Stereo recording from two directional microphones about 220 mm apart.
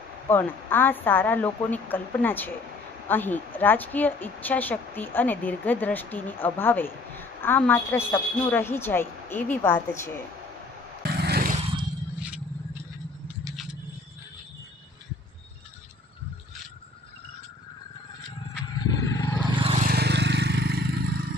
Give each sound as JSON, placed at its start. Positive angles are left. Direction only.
{"t": 0.3, "sound": "a woman's voice", "side_deg": 10}
{"t": 11.0, "sound": "vehicle", "side_deg": -45}
{"t": 11.6, "sound": "a sound", "side_deg": -25}
{"t": 12.2, "sound": "scrape", "side_deg": -5}
{"t": 18.8, "sound": "wild animals", "side_deg": 15}
{"t": 19.5, "sound": "vehicle", "side_deg": -30}
{"t": 19.9, "sound": "vehicle", "side_deg": -50}